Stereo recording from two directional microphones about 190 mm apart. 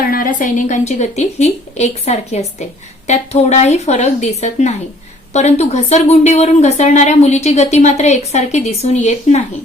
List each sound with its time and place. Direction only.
0.0 s a woman's voice: 45° left (ahead or behind)